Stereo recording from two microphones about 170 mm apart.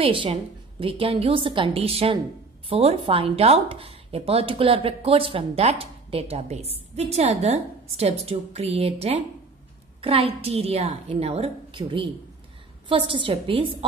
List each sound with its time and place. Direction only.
0.0 s speech: 35° right (ahead or behind)